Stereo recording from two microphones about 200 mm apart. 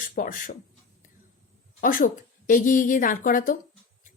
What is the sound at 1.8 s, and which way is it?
A woman's voice, 40° left (ahead or behind).